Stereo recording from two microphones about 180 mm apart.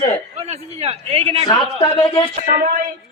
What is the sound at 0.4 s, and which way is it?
Speech, 35° right (ahead or behind).